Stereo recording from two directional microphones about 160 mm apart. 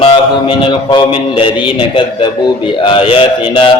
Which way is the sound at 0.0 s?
35° left (ahead or behind).